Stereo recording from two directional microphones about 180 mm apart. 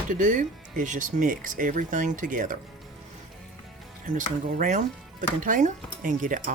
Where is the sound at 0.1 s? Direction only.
45° right (ahead or behind).